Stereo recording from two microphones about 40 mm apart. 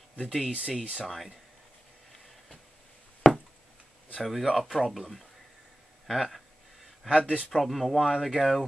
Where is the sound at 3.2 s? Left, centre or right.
Centre.